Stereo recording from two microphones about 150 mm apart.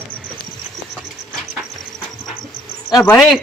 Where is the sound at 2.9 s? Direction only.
20° left (ahead or behind).